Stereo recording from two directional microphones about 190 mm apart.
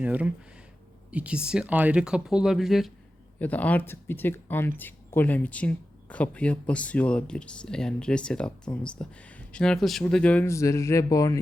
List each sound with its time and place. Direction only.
0.0 s speech: 5° right (ahead or behind); by 11.3 s 15° left (ahead or behind)